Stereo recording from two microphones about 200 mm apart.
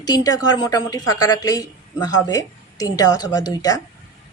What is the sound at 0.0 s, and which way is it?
A woman's voice, 20° left (ahead or behind).